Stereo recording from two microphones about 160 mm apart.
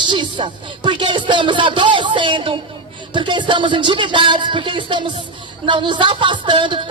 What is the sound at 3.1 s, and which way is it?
Speech, 30° right (ahead or behind).